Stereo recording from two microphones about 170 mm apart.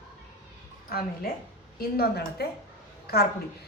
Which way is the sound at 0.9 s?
60° left (ahead or behind).